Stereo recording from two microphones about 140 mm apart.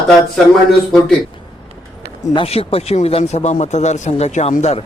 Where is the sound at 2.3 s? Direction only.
40° left (ahead or behind).